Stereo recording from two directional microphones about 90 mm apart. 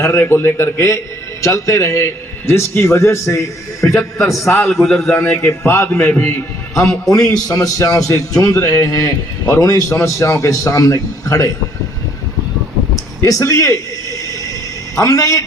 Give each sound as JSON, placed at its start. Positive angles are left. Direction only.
{"t": 0.0, "sound": "a man's voice", "side_deg": 30}
{"t": 4.7, "sound": "a man's voice", "side_deg": 0}
{"t": 4.9, "sound": "a man's voice", "side_deg": 30}
{"t": 7.3, "sound": "a man's voice", "side_deg": 45}
{"t": 13.2, "sound": "a man's voice", "side_deg": 40}
{"t": 14.9, "sound": "a man's voice", "side_deg": 40}